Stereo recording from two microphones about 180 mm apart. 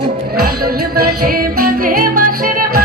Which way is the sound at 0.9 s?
55° right (ahead or behind).